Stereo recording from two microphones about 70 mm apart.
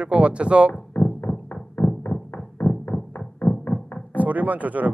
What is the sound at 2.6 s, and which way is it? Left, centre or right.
Music, left.